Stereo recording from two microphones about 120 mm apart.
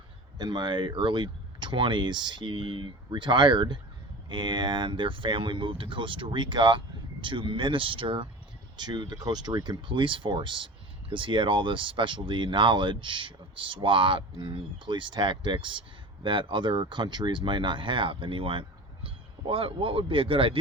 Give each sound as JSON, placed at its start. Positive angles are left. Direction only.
{"t": 0.3, "sound": "speech", "side_deg": -35}